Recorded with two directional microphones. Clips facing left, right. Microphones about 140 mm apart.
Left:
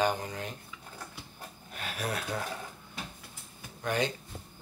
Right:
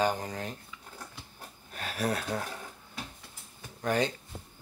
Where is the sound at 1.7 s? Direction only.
35° right (ahead or behind).